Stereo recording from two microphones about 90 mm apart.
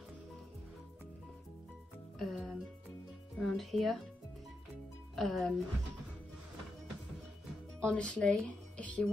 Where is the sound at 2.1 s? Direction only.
5° left (ahead or behind).